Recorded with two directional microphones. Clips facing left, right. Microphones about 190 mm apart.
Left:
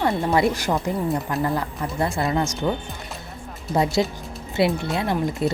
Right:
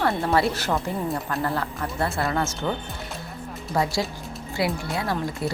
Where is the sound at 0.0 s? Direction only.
15° left (ahead or behind).